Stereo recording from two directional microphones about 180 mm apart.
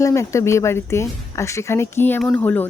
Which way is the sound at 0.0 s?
15° left (ahead or behind).